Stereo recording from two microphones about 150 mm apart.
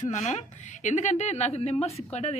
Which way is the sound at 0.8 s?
55° left (ahead or behind).